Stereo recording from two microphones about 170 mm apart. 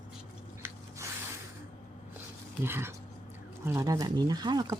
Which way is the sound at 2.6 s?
15° right (ahead or behind).